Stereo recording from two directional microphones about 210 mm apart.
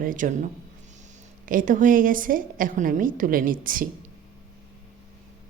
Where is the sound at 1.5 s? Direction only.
40° right (ahead or behind).